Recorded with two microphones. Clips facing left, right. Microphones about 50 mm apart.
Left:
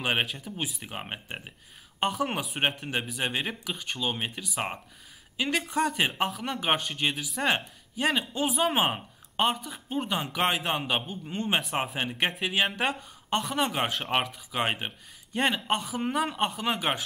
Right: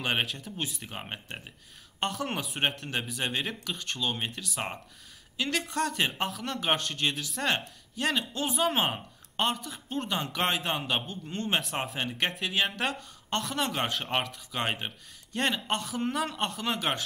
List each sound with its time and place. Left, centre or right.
0.0 s speech: centre